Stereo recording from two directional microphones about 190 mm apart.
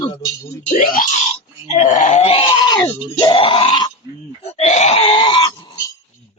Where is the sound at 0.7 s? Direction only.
45° left (ahead or behind).